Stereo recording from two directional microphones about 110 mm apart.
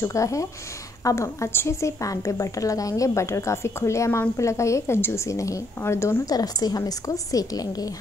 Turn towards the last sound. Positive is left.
turn(degrees=35)  # may be behind; listen again after turning